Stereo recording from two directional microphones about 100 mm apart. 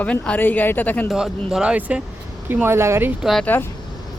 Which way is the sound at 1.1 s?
5° right (ahead or behind).